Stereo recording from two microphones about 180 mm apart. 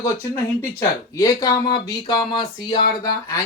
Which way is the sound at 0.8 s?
15° left (ahead or behind).